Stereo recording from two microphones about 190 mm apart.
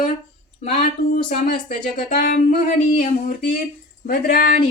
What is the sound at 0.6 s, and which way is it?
Speech, 45° left (ahead or behind).